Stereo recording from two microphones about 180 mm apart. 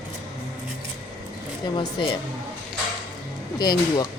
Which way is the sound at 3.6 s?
20° left (ahead or behind).